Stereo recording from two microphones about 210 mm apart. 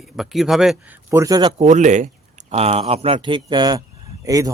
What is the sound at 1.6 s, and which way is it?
Speech, 35° right (ahead or behind).